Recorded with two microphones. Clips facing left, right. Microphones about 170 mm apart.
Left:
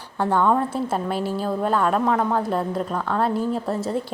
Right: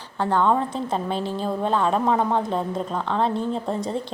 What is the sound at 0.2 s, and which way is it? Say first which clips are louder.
A woman's voice: left 1 dB; 10° left (ahead or behind).